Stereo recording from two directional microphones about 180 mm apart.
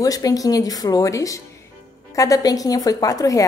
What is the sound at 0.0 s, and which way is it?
A woman's voice, 20° left (ahead or behind).